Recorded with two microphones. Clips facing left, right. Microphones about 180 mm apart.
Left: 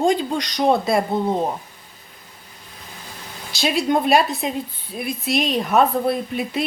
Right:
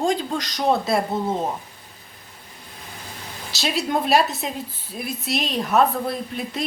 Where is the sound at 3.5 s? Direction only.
Centre (ahead or behind).